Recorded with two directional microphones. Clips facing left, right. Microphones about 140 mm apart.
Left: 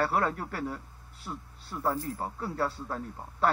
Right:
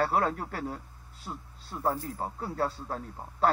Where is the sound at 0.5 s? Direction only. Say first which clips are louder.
Left 1 dB; 25° right (ahead or behind).